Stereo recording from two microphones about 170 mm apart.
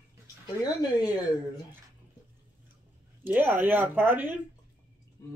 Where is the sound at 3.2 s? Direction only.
10° right (ahead or behind).